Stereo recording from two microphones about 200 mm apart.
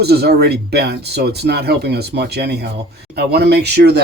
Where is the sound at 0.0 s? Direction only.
55° right (ahead or behind).